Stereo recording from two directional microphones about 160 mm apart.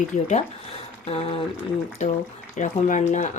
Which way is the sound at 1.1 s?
40° left (ahead or behind).